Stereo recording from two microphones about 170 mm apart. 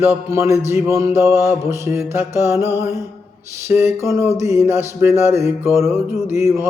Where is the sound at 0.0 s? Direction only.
15° right (ahead or behind).